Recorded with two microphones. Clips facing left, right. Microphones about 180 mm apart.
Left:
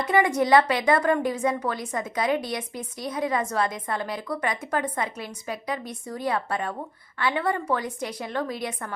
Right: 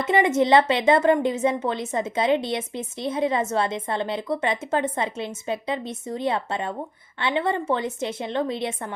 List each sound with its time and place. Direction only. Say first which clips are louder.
0.0 s a woman's voice: right 2 dB; 25° right (ahead or behind)